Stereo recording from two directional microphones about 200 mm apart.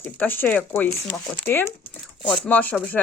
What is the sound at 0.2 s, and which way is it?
Speech, 10° left (ahead or behind).